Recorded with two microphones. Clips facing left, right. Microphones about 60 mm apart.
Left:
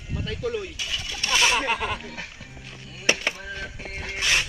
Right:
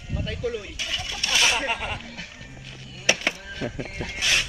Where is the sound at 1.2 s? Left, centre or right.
Left.